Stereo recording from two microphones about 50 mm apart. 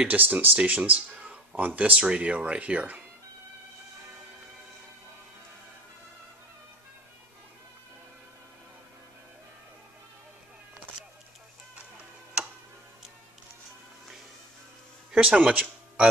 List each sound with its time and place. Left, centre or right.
0.1 s speech: right
15.1 s speech: right